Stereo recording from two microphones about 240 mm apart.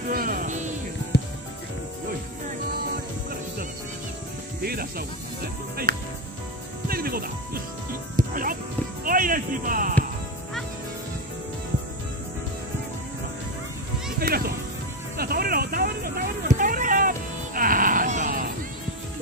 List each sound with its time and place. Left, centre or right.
0.1 s music: right
4.6 s music: right
14.2 s music: right
15.1 s a sound: right